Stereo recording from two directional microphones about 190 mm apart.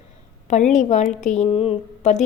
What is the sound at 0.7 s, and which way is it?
A woman's voice, 35° left (ahead or behind).